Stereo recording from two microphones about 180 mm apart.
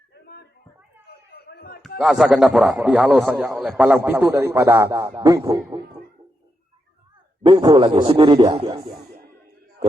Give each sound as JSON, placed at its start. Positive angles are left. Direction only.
{"t": 1.0, "sound": "chop", "side_deg": 60}
{"t": 2.0, "sound": "a man's voice", "side_deg": 0}
{"t": 7.4, "sound": "speech", "side_deg": -25}